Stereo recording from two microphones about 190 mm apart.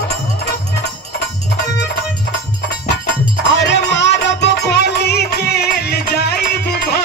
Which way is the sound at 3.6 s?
70° left (ahead or behind).